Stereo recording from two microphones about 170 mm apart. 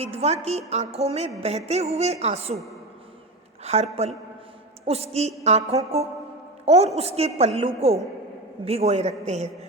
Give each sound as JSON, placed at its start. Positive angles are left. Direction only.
{"t": 0.0, "sound": "a woman's voice", "side_deg": -40}
{"t": 3.6, "sound": "a woman's voice", "side_deg": -40}
{"t": 4.9, "sound": "a woman's voice", "side_deg": -40}